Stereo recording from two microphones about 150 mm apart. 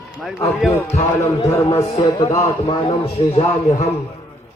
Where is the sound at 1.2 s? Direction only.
20° left (ahead or behind).